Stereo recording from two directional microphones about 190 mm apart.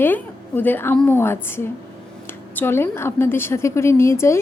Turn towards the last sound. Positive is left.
turn(degrees=15)  # may be behind; listen again after turning